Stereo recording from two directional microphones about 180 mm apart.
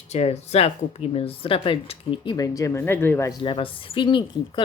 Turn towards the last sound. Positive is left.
turn(degrees=25)  # may be behind; listen again after turning